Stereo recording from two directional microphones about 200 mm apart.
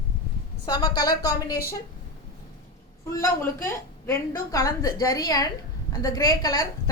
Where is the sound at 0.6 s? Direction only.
20° left (ahead or behind).